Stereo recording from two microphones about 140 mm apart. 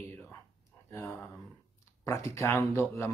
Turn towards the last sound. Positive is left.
turn(degrees=20)  # may be behind; listen again after turning